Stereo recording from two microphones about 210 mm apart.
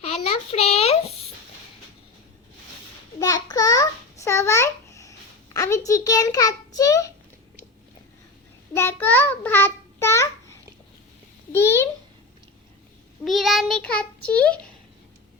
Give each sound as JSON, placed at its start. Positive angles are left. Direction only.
{"t": 0.0, "sound": "a sound", "side_deg": 30}
{"t": 3.2, "sound": "babbling", "side_deg": 15}
{"t": 5.5, "sound": "a sound", "side_deg": 15}
{"t": 8.7, "sound": "child singing", "side_deg": 10}
{"t": 11.5, "sound": "babbling", "side_deg": 10}
{"t": 13.2, "sound": "child singing", "side_deg": 0}